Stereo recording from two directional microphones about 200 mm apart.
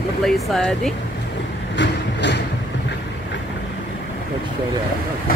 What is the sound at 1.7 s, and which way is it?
Vehicle, 60° left (ahead or behind).